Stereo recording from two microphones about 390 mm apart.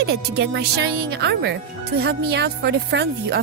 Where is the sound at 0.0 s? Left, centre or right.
Right.